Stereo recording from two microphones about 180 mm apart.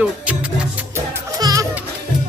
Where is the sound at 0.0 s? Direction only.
5° right (ahead or behind).